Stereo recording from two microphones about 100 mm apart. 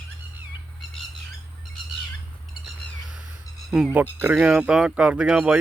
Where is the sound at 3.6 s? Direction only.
Centre (ahead or behind).